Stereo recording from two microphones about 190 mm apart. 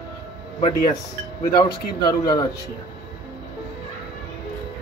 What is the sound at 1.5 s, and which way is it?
Speech, 20° left (ahead or behind).